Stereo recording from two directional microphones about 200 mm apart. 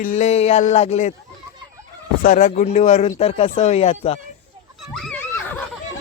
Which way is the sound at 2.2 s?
40° left (ahead or behind).